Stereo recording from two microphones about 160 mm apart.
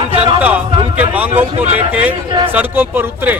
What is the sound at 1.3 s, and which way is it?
Speech, 40° right (ahead or behind).